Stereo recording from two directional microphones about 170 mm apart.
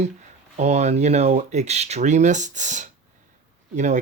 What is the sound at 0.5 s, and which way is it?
Speech, 40° right (ahead or behind).